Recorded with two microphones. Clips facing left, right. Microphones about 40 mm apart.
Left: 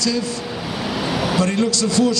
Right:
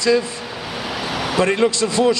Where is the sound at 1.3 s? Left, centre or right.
Right.